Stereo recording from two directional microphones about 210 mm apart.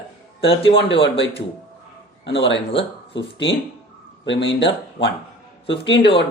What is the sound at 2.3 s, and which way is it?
Speech, 60° left (ahead or behind).